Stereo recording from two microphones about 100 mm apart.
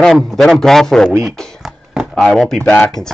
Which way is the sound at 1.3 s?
5° left (ahead or behind).